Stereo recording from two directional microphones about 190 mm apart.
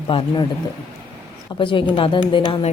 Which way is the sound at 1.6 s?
25° left (ahead or behind).